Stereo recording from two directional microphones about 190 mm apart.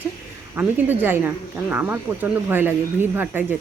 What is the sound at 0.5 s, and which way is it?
Speech, 10° right (ahead or behind).